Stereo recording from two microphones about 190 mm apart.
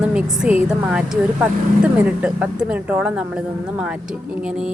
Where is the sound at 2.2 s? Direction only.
5° right (ahead or behind).